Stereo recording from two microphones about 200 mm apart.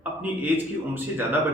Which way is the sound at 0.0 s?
10° right (ahead or behind).